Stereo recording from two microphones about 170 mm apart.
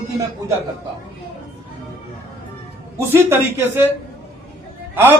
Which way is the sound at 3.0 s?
15° right (ahead or behind).